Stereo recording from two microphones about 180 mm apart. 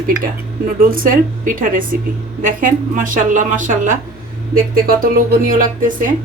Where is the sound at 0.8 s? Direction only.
50° right (ahead or behind).